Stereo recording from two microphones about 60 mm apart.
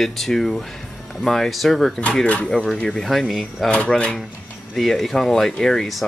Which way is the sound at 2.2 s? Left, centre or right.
Centre.